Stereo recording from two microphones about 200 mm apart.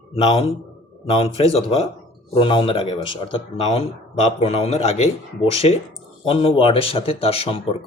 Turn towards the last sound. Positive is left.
turn(degrees=30)  # may be behind; listen again after turning